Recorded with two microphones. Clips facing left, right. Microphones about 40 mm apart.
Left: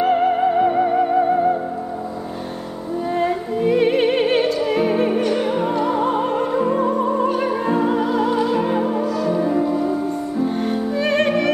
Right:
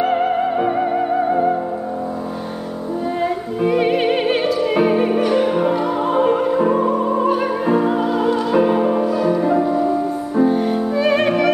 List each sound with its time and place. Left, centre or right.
0.0 s music: centre
3.5 s music: centre
8.8 s music: centre
10.5 s music: centre